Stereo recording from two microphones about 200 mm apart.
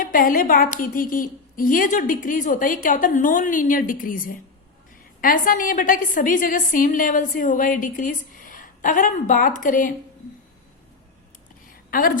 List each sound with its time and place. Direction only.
0.0 s a woman's voice: 45° left (ahead or behind)
11.9 s a woman's voice: 45° left (ahead or behind)